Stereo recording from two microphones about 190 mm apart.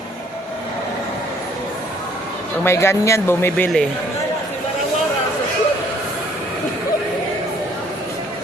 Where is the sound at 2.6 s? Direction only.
15° left (ahead or behind).